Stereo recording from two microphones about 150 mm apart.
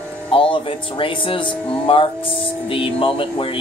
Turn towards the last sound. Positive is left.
turn(degrees=35)  # may be behind; listen again after turning